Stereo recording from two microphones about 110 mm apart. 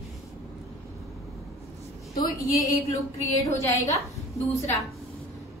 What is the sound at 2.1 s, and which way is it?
A woman's voice, 35° left (ahead or behind).